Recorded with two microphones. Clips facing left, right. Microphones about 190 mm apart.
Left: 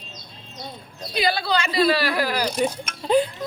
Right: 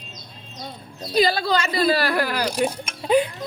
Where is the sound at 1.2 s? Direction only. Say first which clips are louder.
Right 3 dB; 40° right (ahead or behind).